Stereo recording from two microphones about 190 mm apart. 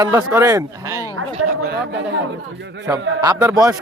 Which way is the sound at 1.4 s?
65° right (ahead or behind).